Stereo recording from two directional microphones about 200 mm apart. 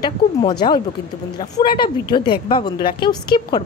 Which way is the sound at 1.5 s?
25° left (ahead or behind).